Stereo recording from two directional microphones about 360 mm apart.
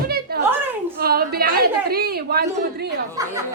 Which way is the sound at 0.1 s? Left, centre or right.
Right.